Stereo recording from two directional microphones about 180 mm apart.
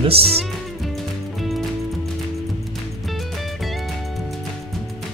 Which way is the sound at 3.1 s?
Centre (ahead or behind).